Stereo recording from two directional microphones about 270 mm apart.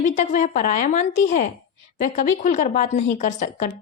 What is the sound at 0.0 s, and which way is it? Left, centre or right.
A woman's voice, left.